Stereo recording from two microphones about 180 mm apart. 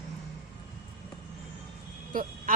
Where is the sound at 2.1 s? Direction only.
50° right (ahead or behind).